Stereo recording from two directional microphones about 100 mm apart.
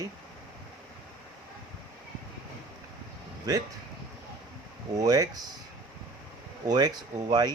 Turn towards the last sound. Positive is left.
turn(degrees=-40)  # may be behind; listen again after turning